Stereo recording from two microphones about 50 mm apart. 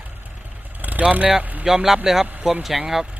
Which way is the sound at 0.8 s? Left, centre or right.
Right.